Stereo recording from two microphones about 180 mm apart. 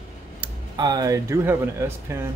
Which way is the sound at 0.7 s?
20° right (ahead or behind).